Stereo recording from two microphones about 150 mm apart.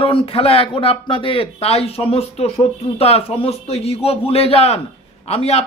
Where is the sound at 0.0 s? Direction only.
35° left (ahead or behind).